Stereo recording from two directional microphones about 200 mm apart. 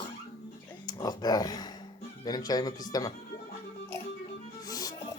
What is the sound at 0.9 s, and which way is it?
Speech, 20° left (ahead or behind).